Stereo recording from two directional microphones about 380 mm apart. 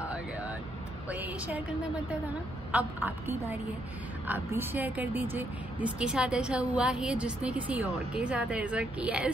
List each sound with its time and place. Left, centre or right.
1.0 s a woman's voice: centre
2.7 s a woman's voice: centre